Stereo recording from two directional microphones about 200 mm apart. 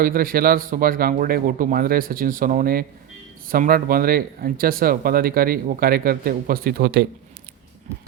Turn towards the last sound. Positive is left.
turn(degrees=-50)  # may be behind; listen again after turning